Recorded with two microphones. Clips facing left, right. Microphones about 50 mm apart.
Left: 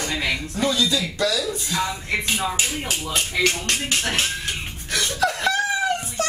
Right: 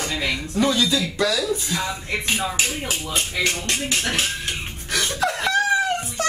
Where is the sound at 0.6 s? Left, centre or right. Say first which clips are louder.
Right 3 dB; centre.